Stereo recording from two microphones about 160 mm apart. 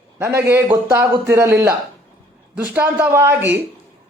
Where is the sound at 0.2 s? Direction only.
15° right (ahead or behind).